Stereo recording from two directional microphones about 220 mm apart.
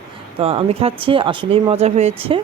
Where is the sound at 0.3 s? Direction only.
25° right (ahead or behind).